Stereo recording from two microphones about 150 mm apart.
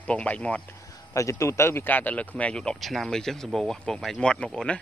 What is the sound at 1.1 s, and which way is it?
Speech, 20° left (ahead or behind).